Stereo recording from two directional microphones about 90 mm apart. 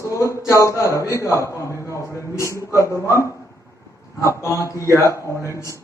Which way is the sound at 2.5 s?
35° left (ahead or behind).